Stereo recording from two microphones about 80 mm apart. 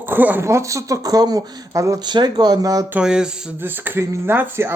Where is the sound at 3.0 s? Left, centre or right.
Centre.